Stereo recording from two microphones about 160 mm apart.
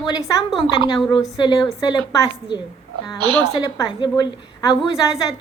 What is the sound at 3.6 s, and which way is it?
A woman's voice, 25° left (ahead or behind).